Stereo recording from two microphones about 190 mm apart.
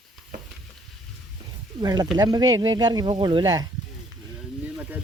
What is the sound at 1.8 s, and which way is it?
Speech, 20° right (ahead or behind).